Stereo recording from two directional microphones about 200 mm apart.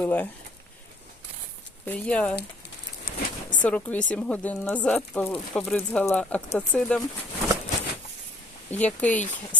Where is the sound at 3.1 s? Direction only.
45° left (ahead or behind).